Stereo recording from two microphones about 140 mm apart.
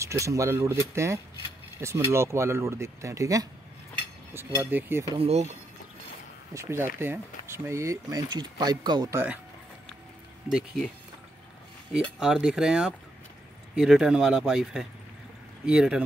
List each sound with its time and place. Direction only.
0.0 s speech: 20° right (ahead or behind)
5.1 s speech: 45° right (ahead or behind)
6.5 s speech: 20° right (ahead or behind)
9.1 s speech: 10° right (ahead or behind)
10.5 s speech: 5° right (ahead or behind)
11.9 s speech: 5° right (ahead or behind)